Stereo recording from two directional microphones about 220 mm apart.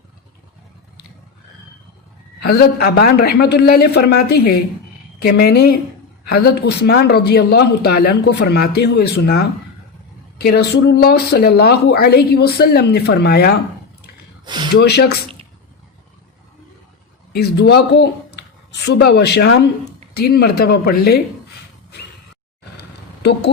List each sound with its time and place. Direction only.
2.4 s speech: 45° left (ahead or behind)
14.4 s speech: 20° right (ahead or behind)
14.8 s speech: 50° left (ahead or behind)
17.3 s speech: 45° left (ahead or behind)
22.8 s a sound: 50° left (ahead or behind)